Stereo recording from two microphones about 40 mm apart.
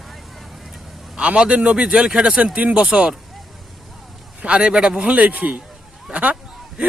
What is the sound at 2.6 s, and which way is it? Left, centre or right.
Speech, right.